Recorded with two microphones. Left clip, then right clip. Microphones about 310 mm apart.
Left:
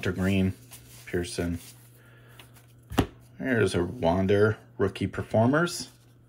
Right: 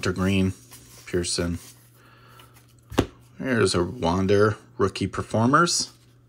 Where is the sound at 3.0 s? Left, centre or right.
Centre.